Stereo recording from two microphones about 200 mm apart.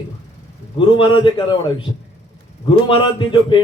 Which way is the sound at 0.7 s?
25° left (ahead or behind).